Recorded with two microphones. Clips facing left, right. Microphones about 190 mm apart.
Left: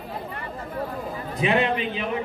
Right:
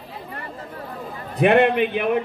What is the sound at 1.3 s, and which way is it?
Speech, 60° right (ahead or behind).